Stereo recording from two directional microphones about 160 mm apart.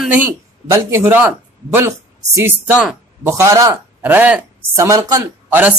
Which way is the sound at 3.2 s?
20° right (ahead or behind).